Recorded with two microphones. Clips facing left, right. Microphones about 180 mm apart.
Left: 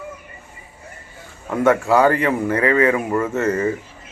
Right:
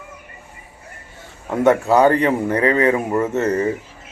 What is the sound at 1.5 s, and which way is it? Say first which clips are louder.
A man's voice: right 1 dB; 20° right (ahead or behind).